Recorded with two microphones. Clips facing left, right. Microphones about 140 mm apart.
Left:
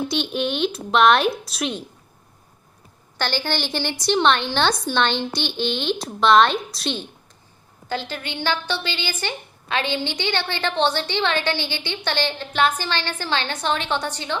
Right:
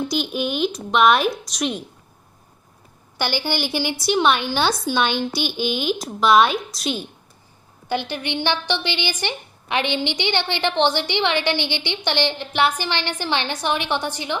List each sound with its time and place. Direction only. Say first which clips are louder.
0.1 s a woman's voice: even; centre (ahead or behind)
3.2 s a woman's voice: right 1 dB; 10° right (ahead or behind)
7.9 s a woman's voice: right 4 dB; 15° right (ahead or behind)